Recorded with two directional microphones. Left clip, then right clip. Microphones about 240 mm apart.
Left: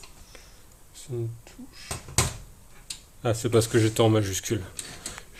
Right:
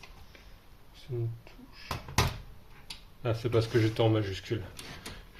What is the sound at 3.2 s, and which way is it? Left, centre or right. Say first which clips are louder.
Speech: left 6 dB; left.